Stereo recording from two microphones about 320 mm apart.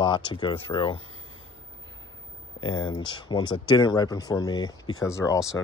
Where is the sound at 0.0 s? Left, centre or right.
Centre.